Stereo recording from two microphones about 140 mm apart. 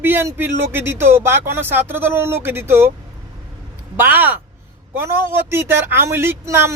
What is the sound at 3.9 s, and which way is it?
A man's voice, 15° right (ahead or behind).